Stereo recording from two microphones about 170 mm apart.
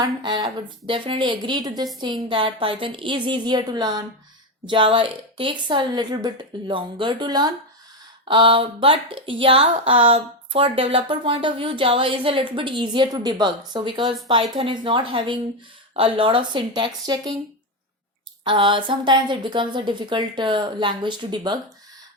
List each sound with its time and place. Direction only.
0.0 s a woman's voice: 25° right (ahead or behind)
18.4 s a woman's voice: 30° right (ahead or behind)